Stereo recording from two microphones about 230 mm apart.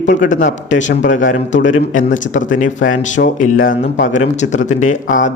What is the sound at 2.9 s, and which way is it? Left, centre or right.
Speech, left.